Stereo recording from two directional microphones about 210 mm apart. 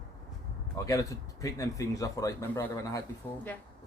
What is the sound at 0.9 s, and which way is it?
A man's voice, 15° left (ahead or behind).